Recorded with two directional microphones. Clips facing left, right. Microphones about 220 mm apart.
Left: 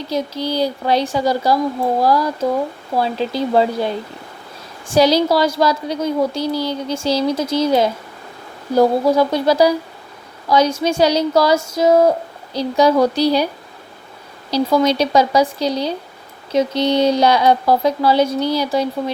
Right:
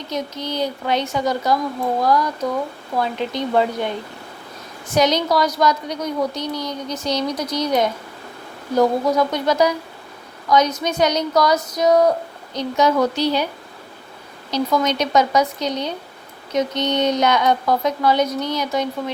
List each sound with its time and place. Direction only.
0.1 s a woman's voice: 30° left (ahead or behind)
14.5 s speech: 30° left (ahead or behind)